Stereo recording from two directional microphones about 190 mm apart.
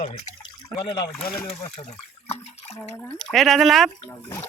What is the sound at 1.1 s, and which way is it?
Speech, 5° left (ahead or behind).